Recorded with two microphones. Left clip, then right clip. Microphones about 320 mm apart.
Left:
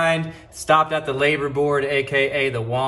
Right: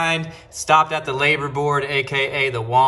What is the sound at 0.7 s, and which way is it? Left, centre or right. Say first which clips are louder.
A man's voice: right 1 dB; centre.